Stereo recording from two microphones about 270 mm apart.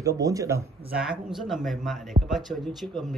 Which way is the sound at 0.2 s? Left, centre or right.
Centre.